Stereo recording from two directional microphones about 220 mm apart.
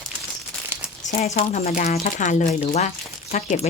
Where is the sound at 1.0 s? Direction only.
30° left (ahead or behind).